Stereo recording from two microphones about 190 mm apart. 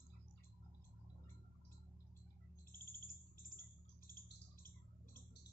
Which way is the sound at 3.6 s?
50° left (ahead or behind).